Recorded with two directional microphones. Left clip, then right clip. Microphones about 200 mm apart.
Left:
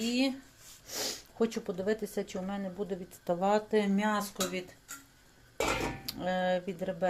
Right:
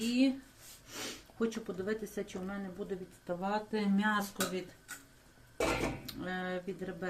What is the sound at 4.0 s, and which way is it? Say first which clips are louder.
Speech: left 1 dB; 35° left (ahead or behind).